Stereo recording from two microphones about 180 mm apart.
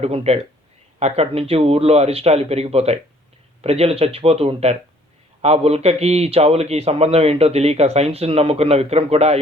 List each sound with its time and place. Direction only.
0.0 s a man's voice: 35° right (ahead or behind)